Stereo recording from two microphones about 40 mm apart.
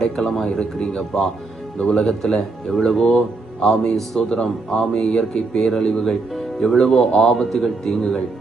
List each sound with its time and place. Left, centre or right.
0.0 s speech: centre
4.2 s speech: centre
4.4 s speech: centre
4.9 s speech: centre